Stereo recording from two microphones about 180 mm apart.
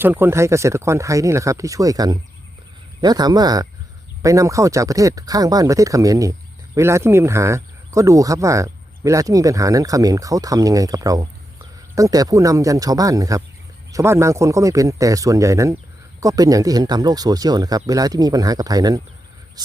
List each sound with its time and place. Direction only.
0.0 s speech: 10° right (ahead or behind)